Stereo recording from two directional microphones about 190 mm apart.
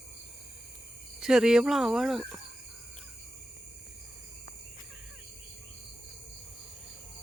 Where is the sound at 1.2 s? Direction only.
5° right (ahead or behind).